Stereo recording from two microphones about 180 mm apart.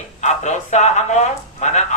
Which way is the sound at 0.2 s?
40° left (ahead or behind).